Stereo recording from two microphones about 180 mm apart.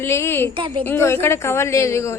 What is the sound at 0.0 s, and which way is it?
Speech, 15° left (ahead or behind).